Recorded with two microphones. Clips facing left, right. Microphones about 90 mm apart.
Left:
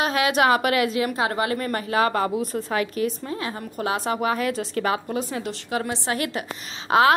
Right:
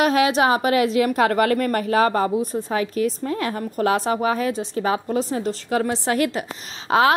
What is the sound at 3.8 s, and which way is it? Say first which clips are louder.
A woman's voice: right 4 dB; 40° right (ahead or behind).